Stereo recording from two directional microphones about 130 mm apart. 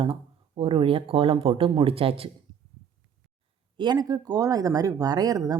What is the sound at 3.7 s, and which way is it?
Speech, 35° right (ahead or behind).